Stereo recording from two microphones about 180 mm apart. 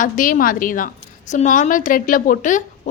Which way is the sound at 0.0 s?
50° left (ahead or behind).